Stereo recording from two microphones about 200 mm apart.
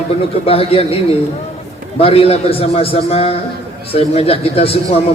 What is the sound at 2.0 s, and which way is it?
A man's voice, 30° left (ahead or behind).